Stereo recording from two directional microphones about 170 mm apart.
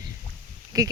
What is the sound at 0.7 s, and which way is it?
Speech, 20° right (ahead or behind).